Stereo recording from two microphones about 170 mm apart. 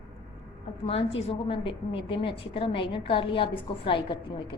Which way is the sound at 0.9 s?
35° left (ahead or behind).